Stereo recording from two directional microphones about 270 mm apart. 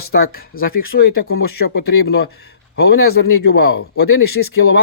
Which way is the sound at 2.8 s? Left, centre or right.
Left.